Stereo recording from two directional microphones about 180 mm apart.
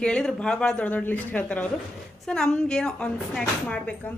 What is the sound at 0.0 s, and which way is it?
A woman's voice, 5° left (ahead or behind).